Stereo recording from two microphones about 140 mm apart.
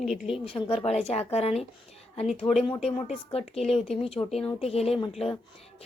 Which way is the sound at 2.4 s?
35° left (ahead or behind).